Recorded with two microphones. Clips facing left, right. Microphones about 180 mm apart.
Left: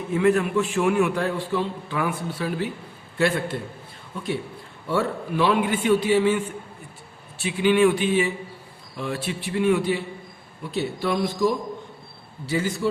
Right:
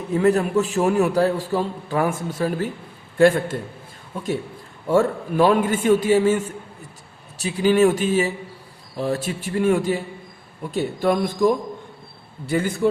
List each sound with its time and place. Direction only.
0.1 s a man's voice: 40° right (ahead or behind)
4.9 s a man's voice: 45° right (ahead or behind)